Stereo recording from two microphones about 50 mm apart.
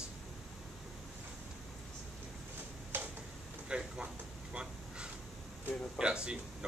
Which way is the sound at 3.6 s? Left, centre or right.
Centre.